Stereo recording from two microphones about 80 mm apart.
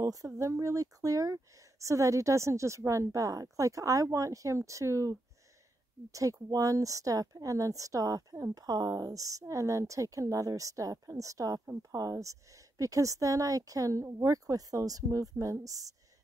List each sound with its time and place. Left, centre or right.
0.0 s speech: right
6.1 s speech: right